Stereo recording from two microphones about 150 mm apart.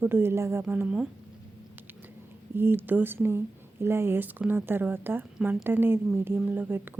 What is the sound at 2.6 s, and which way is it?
Speech, 15° right (ahead or behind).